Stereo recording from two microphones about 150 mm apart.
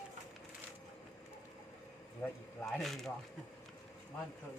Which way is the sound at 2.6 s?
Centre (ahead or behind).